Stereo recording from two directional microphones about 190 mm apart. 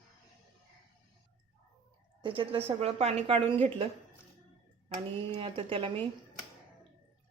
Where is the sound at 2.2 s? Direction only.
25° right (ahead or behind).